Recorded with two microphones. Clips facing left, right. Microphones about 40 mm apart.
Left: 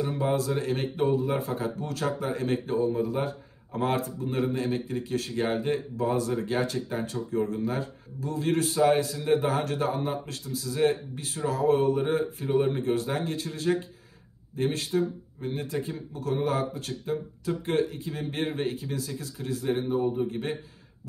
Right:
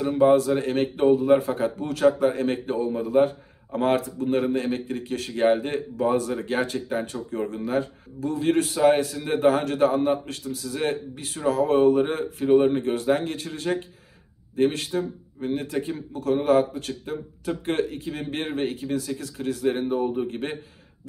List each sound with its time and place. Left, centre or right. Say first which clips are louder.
0.2 s a man's voice: right 11 dB; right